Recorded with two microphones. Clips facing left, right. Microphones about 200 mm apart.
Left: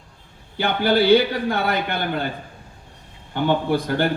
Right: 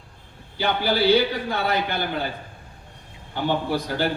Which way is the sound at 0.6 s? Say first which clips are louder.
Left 3 dB; 55° left (ahead or behind).